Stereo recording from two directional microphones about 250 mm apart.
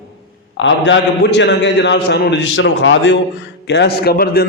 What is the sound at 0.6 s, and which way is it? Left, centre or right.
A man's voice, left.